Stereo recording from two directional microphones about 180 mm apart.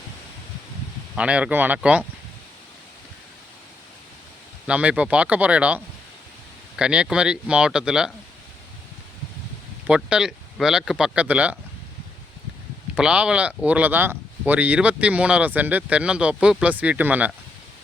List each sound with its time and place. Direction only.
1.1 s speech: 5° right (ahead or behind)
4.6 s speech: 5° right (ahead or behind)
9.8 s speech: 5° right (ahead or behind)
12.9 s speech: 5° right (ahead or behind)